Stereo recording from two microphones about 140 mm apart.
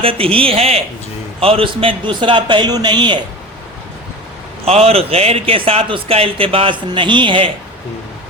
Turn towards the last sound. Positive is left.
turn(degrees=-35)  # may be behind; listen again after turning